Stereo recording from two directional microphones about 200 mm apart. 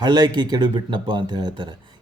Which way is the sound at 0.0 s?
20° right (ahead or behind).